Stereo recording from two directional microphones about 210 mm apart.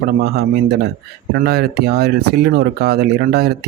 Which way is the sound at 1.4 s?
50° right (ahead or behind).